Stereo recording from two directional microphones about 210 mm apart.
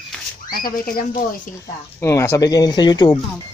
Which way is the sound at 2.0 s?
10° left (ahead or behind).